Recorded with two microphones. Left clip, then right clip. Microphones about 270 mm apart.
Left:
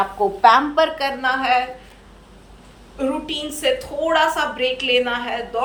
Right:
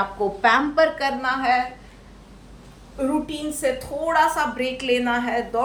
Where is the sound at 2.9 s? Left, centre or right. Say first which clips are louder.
Left 1 dB; right.